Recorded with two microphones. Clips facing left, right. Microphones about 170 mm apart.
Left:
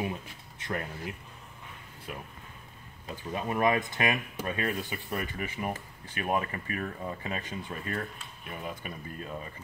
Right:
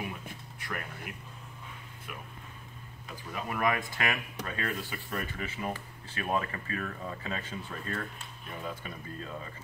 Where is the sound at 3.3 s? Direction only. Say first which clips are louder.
Left 4 dB; 25° left (ahead or behind).